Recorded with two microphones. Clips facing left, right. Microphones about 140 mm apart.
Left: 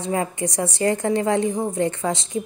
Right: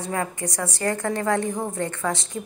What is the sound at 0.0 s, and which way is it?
A woman's voice, 20° left (ahead or behind).